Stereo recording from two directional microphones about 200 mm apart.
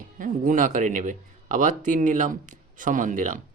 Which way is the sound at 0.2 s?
40° right (ahead or behind).